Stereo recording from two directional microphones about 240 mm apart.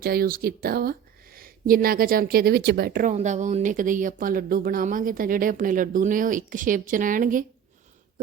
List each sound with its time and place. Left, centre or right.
0.0 s speech: right